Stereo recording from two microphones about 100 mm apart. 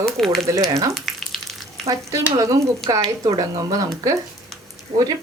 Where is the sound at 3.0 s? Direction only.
45° right (ahead or behind).